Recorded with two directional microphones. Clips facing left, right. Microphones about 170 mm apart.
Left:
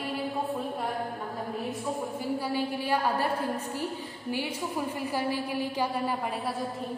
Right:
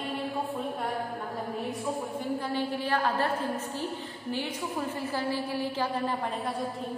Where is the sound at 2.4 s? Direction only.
10° left (ahead or behind).